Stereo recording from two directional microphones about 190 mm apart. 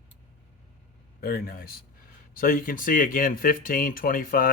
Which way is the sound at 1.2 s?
50° left (ahead or behind).